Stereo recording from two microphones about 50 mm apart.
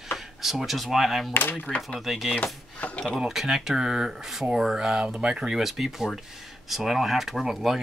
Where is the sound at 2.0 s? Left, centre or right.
Centre.